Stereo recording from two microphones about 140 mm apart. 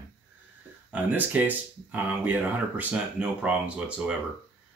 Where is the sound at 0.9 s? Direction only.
10° right (ahead or behind).